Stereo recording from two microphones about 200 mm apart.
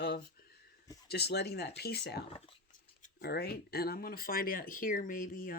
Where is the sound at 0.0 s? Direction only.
50° left (ahead or behind).